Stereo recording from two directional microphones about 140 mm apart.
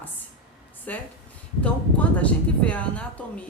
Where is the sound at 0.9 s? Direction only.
10° left (ahead or behind).